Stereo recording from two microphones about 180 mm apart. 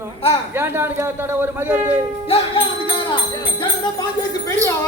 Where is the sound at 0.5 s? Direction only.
15° right (ahead or behind).